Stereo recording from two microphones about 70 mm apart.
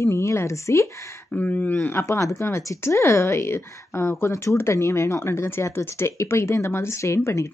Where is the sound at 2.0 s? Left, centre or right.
Left.